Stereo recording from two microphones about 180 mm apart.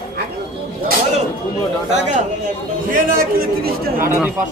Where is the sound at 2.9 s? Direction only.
50° right (ahead or behind).